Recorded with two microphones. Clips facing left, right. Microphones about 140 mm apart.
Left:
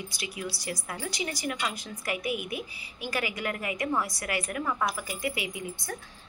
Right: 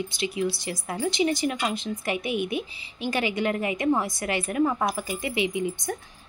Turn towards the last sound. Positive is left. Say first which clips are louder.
# right 8 dB
turn(degrees=-20)  # may be behind; listen again after turning